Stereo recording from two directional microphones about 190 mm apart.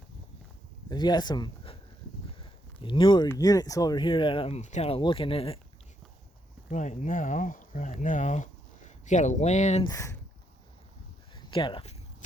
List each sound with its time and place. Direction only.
0.9 s speech: 20° left (ahead or behind)
2.8 s speech: 25° left (ahead or behind)
6.7 s speech: 40° left (ahead or behind)
9.8 s speech: 15° left (ahead or behind)
11.5 s speech: 25° left (ahead or behind)